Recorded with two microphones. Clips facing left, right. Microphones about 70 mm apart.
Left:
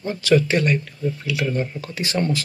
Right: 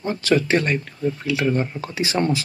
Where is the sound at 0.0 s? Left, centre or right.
Right.